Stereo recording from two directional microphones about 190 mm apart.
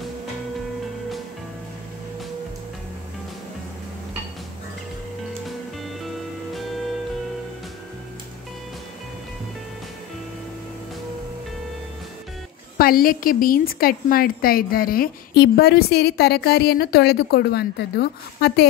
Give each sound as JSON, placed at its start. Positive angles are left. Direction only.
{"t": 12.7, "sound": "a woman's voice", "side_deg": 50}